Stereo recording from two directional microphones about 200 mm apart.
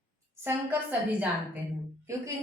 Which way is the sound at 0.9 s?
10° right (ahead or behind).